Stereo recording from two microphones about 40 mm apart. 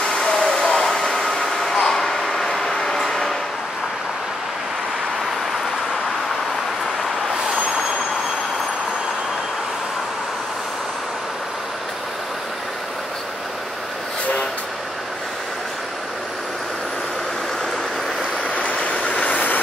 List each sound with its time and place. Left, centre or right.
0.0 s a sound: centre
1.2 s vehicle: centre
18.5 s train: left